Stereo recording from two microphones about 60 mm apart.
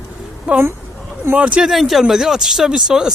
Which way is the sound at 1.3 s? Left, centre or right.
Right.